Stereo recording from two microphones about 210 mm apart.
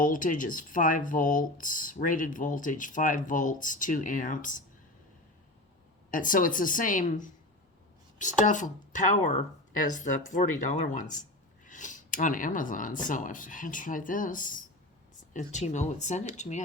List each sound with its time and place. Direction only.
0.0 s speech: 40° left (ahead or behind)
6.1 s speech: 40° left (ahead or behind)